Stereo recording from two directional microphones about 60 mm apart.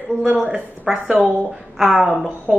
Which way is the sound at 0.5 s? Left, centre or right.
Centre.